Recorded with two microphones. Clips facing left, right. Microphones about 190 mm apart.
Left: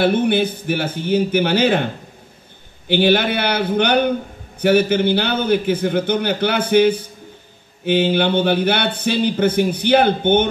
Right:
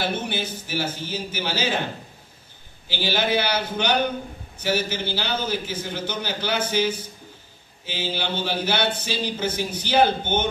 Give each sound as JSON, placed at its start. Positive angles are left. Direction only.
{"t": 0.0, "sound": "speech", "side_deg": 60}
{"t": 2.9, "sound": "speech", "side_deg": 60}